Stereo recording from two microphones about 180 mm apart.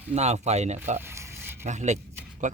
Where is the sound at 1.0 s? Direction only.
15° right (ahead or behind).